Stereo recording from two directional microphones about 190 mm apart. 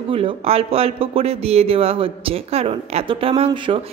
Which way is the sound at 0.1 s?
30° right (ahead or behind).